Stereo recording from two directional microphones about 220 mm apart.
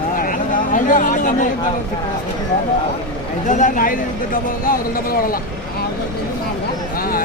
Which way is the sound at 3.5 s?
35° left (ahead or behind).